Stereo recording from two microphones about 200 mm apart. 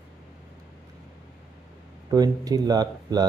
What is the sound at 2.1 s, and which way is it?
Speech, 20° right (ahead or behind).